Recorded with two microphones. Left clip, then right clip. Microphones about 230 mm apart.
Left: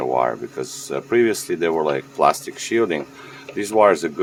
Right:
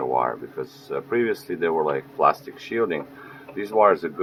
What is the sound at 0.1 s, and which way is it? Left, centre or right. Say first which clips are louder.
Speech: left 3 dB; left.